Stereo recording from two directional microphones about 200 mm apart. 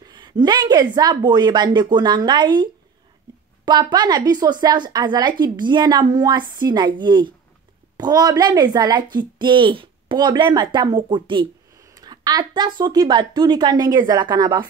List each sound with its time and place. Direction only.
0.0 s a woman's voice: 20° right (ahead or behind)